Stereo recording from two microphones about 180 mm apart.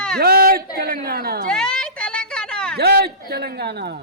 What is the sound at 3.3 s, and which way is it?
Speech, 60° right (ahead or behind).